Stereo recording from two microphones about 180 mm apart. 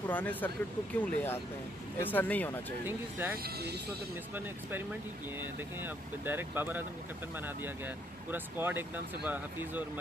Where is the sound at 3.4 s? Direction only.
65° right (ahead or behind).